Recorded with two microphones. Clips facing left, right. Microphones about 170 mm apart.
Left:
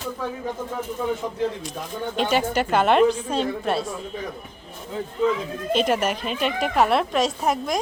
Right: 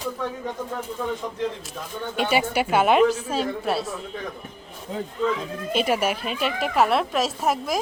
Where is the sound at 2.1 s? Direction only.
10° right (ahead or behind).